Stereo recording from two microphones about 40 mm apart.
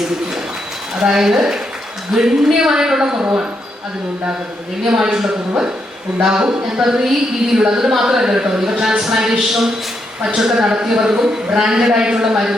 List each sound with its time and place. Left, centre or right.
0.9 s a man's voice: centre
4.8 s a man's voice: centre
6.2 s a man's voice: centre